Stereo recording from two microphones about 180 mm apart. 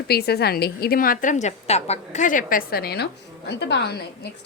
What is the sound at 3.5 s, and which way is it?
Speech, 70° left (ahead or behind).